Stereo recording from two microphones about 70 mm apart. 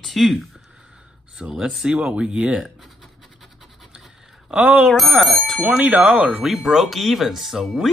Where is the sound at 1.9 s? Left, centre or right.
Centre.